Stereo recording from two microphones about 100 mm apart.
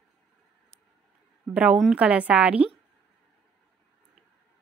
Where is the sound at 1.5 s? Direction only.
10° right (ahead or behind).